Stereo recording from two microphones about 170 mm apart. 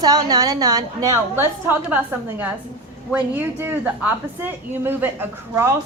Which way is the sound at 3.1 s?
10° right (ahead or behind).